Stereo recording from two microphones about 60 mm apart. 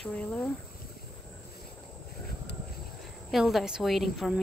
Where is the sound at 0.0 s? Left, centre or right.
Centre.